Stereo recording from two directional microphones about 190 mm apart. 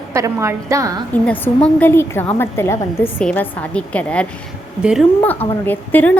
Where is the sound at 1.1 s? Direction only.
5° left (ahead or behind).